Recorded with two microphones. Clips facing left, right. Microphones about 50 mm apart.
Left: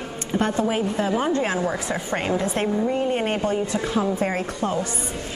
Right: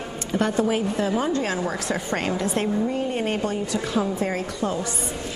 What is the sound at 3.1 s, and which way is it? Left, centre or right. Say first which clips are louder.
Speech: left 2 dB; left.